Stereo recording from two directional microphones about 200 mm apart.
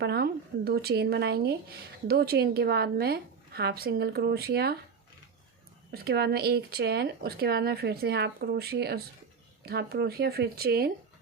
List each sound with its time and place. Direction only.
0.0 s speech: 55° right (ahead or behind)
5.9 s speech: 50° right (ahead or behind)